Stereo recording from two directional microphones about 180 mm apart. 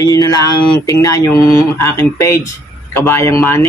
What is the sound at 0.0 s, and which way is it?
Speech, 20° left (ahead or behind).